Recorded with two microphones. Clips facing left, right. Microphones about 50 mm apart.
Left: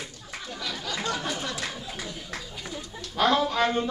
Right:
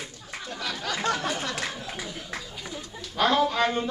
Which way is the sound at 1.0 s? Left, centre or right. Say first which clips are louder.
Right 4 dB; right.